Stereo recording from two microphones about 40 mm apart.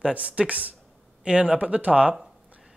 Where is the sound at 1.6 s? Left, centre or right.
Right.